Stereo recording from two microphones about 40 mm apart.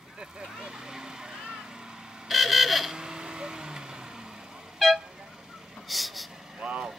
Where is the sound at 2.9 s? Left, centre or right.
Centre.